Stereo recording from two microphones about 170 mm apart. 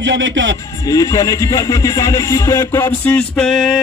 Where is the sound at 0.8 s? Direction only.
20° left (ahead or behind).